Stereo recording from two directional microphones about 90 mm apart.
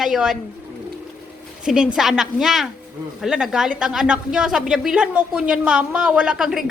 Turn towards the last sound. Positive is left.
turn(degrees=-5)  # may be behind; listen again after turning